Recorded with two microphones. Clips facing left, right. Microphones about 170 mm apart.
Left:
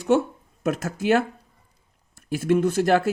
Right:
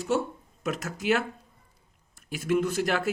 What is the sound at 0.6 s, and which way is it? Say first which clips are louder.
Speech: left 5 dB; 45° left (ahead or behind).